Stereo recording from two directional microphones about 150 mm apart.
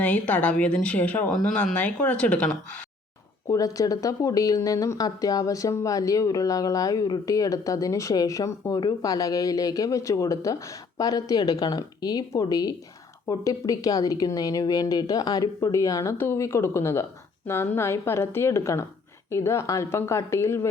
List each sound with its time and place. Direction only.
0.0 s a woman's voice: 10° left (ahead or behind)
3.5 s a woman's voice: 20° left (ahead or behind)